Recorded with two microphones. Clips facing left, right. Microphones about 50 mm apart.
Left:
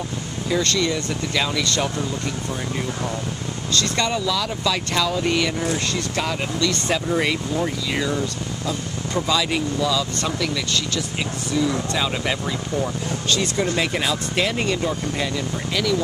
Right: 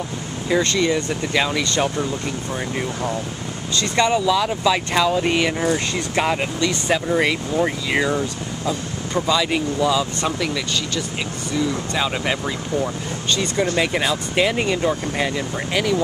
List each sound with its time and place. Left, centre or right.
0.5 s speech: centre
3.7 s speech: centre
6.7 s speech: centre
7.6 s speech: right
9.1 s speech: centre
9.8 s speech: right
11.9 s speech: centre